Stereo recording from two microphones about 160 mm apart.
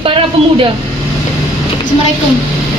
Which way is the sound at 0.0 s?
35° right (ahead or behind).